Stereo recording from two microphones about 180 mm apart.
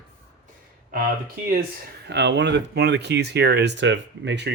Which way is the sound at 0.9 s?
55° right (ahead or behind).